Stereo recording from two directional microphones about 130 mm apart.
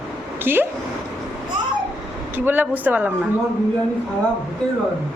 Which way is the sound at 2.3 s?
15° right (ahead or behind).